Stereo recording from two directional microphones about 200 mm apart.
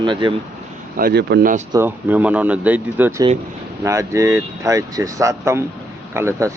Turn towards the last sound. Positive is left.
turn(degrees=-15)  # may be behind; listen again after turning